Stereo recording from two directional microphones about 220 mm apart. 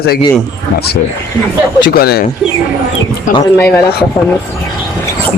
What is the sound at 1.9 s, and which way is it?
Speech, 45° left (ahead or behind).